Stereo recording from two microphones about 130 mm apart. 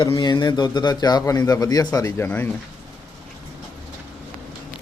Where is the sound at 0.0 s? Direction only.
35° left (ahead or behind); by 2.6 s 15° left (ahead or behind).